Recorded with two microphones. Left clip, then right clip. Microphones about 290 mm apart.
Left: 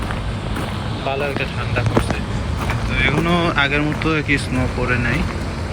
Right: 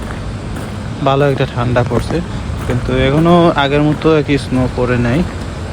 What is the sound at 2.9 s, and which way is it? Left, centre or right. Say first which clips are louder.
Speech: right 7 dB; centre.